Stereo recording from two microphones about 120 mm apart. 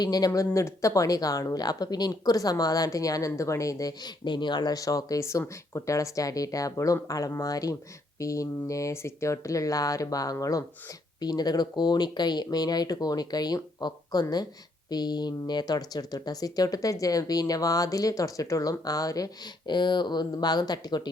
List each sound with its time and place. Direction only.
0.0 s speech: 35° left (ahead or behind)